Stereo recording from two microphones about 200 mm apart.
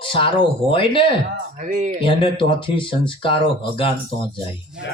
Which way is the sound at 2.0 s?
25° left (ahead or behind).